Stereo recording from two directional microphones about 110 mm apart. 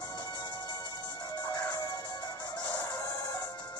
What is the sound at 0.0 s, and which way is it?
Music, 40° left (ahead or behind).